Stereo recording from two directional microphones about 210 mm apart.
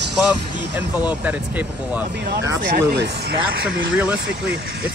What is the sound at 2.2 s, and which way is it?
Speech, 55° right (ahead or behind).